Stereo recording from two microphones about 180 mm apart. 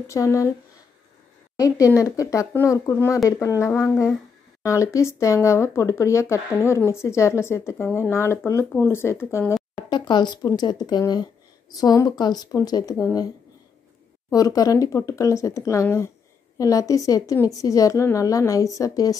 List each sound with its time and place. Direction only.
0.1 s speech: 15° left (ahead or behind)
1.6 s speech: 20° left (ahead or behind)
9.8 s a woman's voice: 25° left (ahead or behind)
14.3 s a woman's voice: 20° left (ahead or behind)